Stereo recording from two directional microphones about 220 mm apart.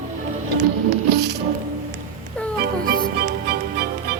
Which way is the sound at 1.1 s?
50° right (ahead or behind).